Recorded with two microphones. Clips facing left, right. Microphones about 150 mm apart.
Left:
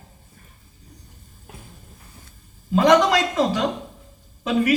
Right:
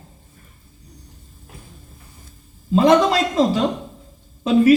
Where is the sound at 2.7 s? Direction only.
25° right (ahead or behind).